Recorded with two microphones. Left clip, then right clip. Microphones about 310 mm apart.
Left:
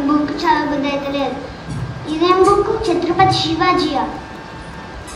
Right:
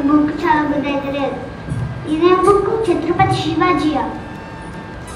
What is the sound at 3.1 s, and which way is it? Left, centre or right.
Speech, left.